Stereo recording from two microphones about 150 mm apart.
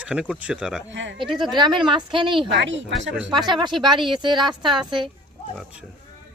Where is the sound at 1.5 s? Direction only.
30° right (ahead or behind).